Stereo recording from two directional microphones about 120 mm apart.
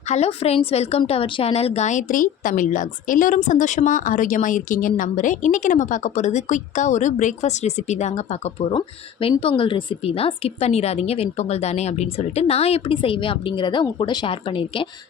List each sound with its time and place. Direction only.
0.1 s a woman's voice: 60° left (ahead or behind)
9.4 s a woman's voice: 50° left (ahead or behind)